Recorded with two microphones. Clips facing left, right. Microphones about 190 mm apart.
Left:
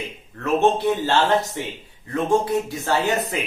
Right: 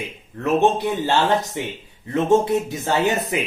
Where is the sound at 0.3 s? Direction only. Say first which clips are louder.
Right 1 dB; 15° right (ahead or behind).